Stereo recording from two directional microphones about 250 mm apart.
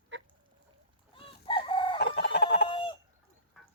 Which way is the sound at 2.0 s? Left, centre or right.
Left.